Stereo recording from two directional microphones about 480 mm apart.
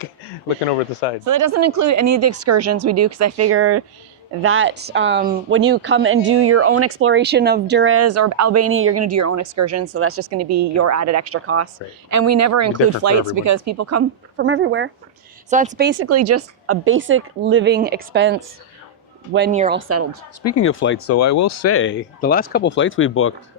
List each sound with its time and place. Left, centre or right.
1.2 s speech: right; by 19.8 s centre
20.4 s speech: left